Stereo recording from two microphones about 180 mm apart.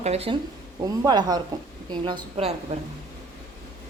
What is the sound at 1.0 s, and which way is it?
A woman's voice, 20° right (ahead or behind).